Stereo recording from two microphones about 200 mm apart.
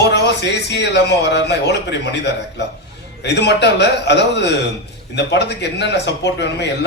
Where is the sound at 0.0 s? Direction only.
60° left (ahead or behind).